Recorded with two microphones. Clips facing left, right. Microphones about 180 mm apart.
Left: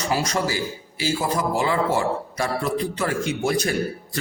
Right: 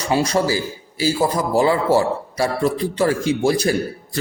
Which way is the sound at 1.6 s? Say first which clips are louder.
Right 8 dB; 35° right (ahead or behind).